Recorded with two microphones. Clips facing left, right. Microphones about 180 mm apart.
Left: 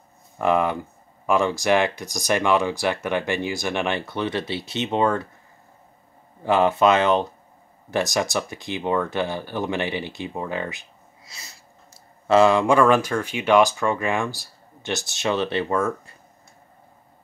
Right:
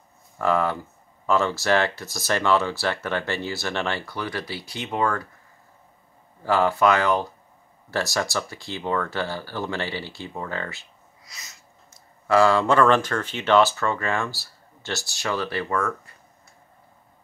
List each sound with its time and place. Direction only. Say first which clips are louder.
0.4 s speech: left 2 dB; 15° left (ahead or behind)
6.4 s speech: left 2 dB; 20° left (ahead or behind)
11.3 s speech: left 1 dB; 30° left (ahead or behind)